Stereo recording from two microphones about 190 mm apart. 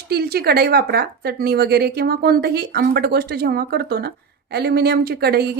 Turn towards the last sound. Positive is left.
turn(degrees=-55)  # may be behind; listen again after turning